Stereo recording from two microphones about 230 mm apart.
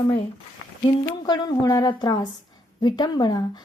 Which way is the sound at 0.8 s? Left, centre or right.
Left.